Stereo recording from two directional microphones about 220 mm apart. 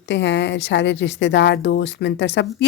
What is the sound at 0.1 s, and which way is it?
Speech, 55° left (ahead or behind).